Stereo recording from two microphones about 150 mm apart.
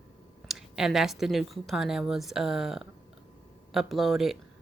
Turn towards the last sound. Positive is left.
turn(degrees=0)  # may be behind; listen again after turning